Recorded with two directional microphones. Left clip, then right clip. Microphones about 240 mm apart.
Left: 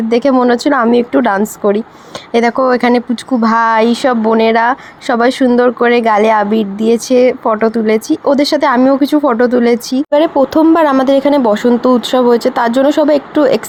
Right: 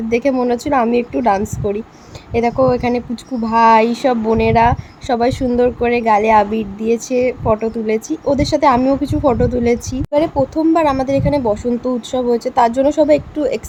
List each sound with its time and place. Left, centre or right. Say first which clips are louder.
0.1 s speech: left 5 dB; centre